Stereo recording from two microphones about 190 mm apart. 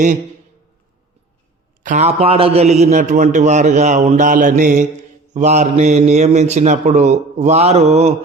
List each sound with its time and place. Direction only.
1.8 s a man's voice: 40° right (ahead or behind)